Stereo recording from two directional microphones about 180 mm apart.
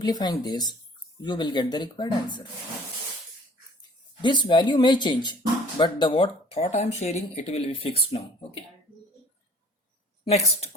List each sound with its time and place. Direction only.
0.0 s speech: 25° left (ahead or behind)
3.8 s speech: 25° left (ahead or behind)
10.2 s speech: 35° left (ahead or behind)